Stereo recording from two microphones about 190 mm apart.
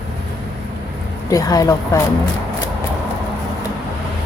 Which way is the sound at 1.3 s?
20° left (ahead or behind).